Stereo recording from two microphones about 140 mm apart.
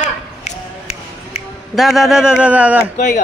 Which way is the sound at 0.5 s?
50° left (ahead or behind).